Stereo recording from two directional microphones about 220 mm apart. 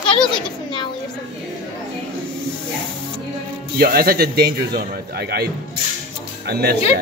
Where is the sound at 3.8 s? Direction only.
40° right (ahead or behind).